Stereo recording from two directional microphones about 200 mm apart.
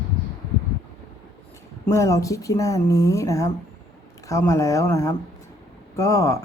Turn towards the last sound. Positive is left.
turn(degrees=15)  # may be behind; listen again after turning